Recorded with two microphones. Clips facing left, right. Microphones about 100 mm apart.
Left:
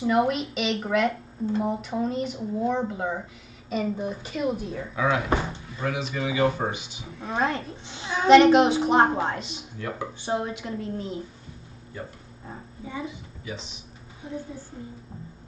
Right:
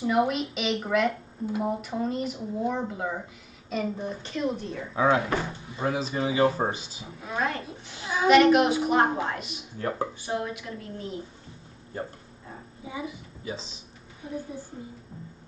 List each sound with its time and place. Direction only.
0.0 s speech: centre (ahead or behind)
4.9 s speech: 30° right (ahead or behind)
5.9 s speech: 35° right (ahead or behind)
7.2 s a woman's voice: 30° left (ahead or behind)
9.8 s speech: 40° right (ahead or behind)
10.2 s a woman's voice: 25° left (ahead or behind)
12.8 s a woman's voice: 10° right (ahead or behind)
13.4 s speech: 35° right (ahead or behind)